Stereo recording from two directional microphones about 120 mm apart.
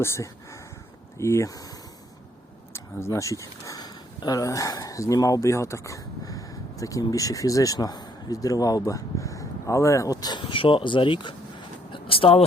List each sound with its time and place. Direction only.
0.0 s speech: 20° left (ahead or behind)
2.7 s speech: 20° left (ahead or behind)
10.4 s speech: 45° left (ahead or behind)
11.9 s a sound: 50° left (ahead or behind)